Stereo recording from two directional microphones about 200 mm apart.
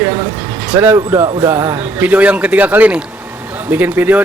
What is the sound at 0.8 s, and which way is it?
Speech, 10° right (ahead or behind).